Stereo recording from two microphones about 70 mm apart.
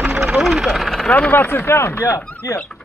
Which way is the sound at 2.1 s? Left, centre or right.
Left.